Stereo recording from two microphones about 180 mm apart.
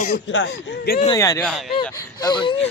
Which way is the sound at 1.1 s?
15° left (ahead or behind).